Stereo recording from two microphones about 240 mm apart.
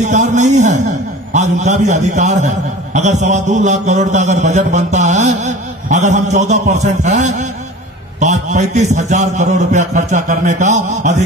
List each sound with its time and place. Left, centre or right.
0.0 s a man's voice: right